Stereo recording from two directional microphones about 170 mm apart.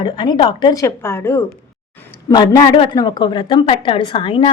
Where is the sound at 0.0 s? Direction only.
30° left (ahead or behind).